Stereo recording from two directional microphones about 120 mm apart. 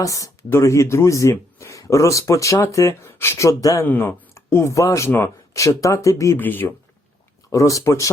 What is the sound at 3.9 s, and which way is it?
Speech, 15° left (ahead or behind).